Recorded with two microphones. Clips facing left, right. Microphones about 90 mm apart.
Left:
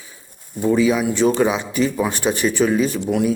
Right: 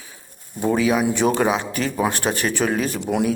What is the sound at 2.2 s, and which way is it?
Speech, 20° right (ahead or behind).